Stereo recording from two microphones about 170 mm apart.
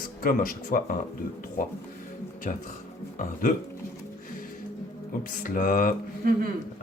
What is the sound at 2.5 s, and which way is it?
Speech, 50° left (ahead or behind).